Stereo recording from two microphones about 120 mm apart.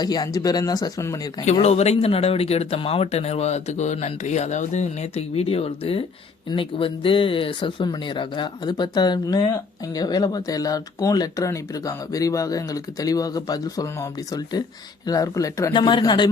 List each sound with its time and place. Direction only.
0.0 s speech: 35° left (ahead or behind)
1.6 s speech: 65° left (ahead or behind); by 15.7 s 25° left (ahead or behind)
15.7 s speech: 40° left (ahead or behind)